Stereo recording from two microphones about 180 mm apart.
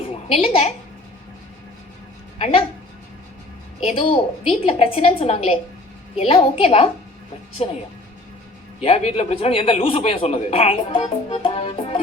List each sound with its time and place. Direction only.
0.0 s a sound: 30° left (ahead or behind)
2.4 s a man's voice: 30° left (ahead or behind)
3.8 s a man's voice: 35° left (ahead or behind)
8.8 s a man's voice: 35° left (ahead or behind)